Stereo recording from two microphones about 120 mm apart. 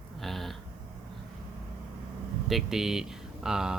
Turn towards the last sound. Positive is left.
turn(degrees=-5)  # may be behind; listen again after turning